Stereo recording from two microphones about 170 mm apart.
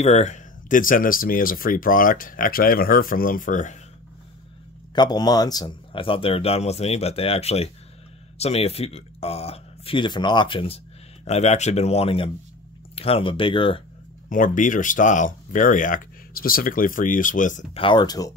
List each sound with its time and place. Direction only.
0.0 s speech: 40° left (ahead or behind)
4.9 s speech: 25° left (ahead or behind)
14.3 s speech: 50° left (ahead or behind)
17.7 s speech: 30° left (ahead or behind)